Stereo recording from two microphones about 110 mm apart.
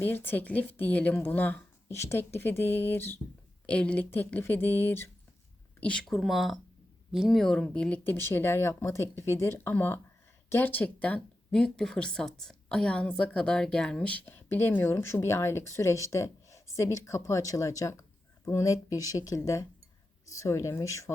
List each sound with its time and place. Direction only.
0.0 s speech: 20° left (ahead or behind)
5.8 s speech: 10° left (ahead or behind); by 21.1 s 30° left (ahead or behind)